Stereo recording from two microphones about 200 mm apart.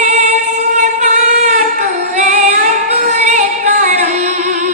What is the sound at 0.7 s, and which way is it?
Female singing, 40° right (ahead or behind).